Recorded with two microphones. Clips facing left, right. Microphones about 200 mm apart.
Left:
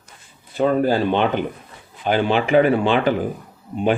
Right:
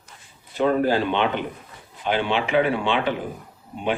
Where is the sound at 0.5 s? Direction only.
40° left (ahead or behind).